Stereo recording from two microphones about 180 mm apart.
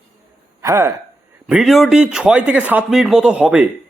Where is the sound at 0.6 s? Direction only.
15° right (ahead or behind).